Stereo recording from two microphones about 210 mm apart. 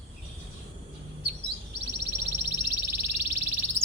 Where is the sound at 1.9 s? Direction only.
20° left (ahead or behind).